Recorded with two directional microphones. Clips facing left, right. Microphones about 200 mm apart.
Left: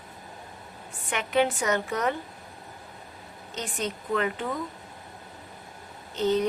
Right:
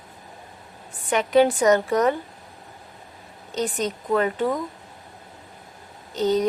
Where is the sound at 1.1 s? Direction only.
35° right (ahead or behind).